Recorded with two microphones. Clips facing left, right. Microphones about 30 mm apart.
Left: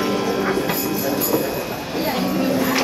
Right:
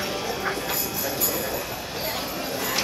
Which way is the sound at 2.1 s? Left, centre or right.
Centre.